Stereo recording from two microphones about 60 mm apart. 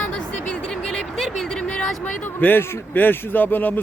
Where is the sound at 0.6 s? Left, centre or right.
Centre.